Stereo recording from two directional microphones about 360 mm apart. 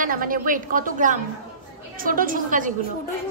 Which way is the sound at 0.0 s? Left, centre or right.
Right.